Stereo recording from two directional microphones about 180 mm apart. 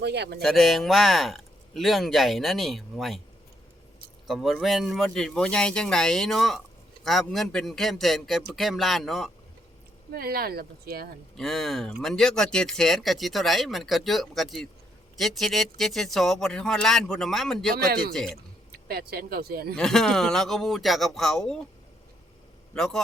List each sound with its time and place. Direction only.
0.0 s speech: 70° right (ahead or behind)
0.4 s speech: centre (ahead or behind)
4.3 s speech: centre (ahead or behind)
10.2 s speech: 55° right (ahead or behind)
11.3 s speech: centre (ahead or behind)
18.7 s speech: 60° right (ahead or behind)
19.7 s speech: centre (ahead or behind)
22.7 s a man's voice: 5° left (ahead or behind)